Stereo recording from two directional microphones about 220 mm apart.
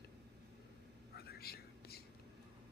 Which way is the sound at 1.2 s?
45° left (ahead or behind).